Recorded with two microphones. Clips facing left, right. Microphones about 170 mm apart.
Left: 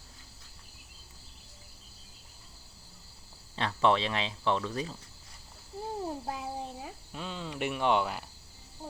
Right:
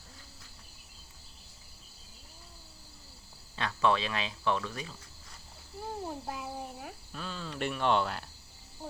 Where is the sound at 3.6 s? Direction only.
30° left (ahead or behind).